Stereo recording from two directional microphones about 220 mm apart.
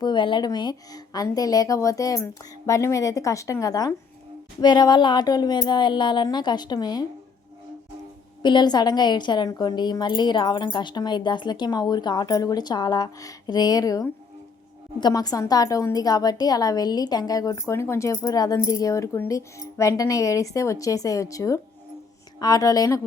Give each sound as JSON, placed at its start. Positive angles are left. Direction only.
{"t": 0.0, "sound": "a woman's voice", "side_deg": 20}
{"t": 8.4, "sound": "a woman's voice", "side_deg": 20}